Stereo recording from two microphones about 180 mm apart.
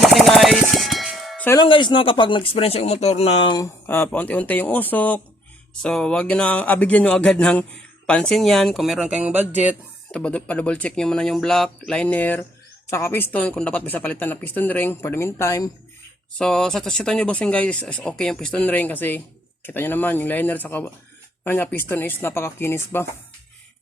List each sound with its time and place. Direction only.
0.0 s a sound: centre (ahead or behind)
1.5 s speech: 25° left (ahead or behind)
3.8 s speech: 10° left (ahead or behind); by 9.7 s 10° right (ahead or behind)
10.1 s speech: 5° left (ahead or behind)
16.4 s speech: 5° left (ahead or behind)